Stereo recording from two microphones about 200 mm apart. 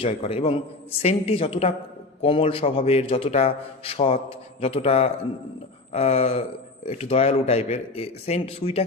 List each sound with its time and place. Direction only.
0.0 s a man's voice: 30° left (ahead or behind)